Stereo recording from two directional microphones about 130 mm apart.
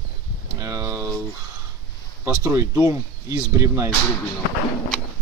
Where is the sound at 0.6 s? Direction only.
25° right (ahead or behind).